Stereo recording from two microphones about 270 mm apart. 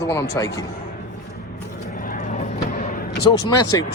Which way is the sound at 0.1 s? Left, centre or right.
Centre.